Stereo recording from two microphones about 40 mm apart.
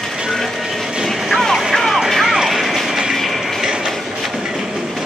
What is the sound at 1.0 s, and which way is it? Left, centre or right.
Vehicle, centre.